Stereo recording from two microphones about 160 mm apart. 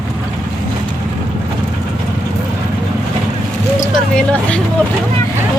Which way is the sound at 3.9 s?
5° left (ahead or behind).